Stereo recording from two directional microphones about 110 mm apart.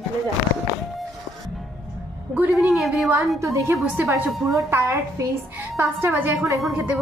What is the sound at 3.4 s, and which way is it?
A woman's voice, 25° right (ahead or behind).